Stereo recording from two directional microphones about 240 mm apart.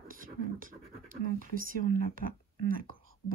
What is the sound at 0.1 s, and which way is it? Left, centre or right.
Speech, right.